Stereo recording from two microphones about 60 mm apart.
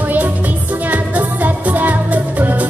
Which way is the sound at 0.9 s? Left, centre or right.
Right.